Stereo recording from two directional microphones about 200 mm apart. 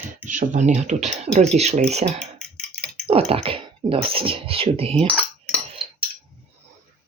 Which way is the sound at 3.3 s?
25° right (ahead or behind).